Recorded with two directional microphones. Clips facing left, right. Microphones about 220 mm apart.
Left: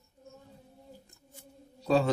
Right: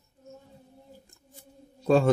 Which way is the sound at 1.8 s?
50° right (ahead or behind).